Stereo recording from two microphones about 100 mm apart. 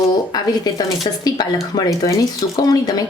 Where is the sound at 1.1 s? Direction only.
55° left (ahead or behind).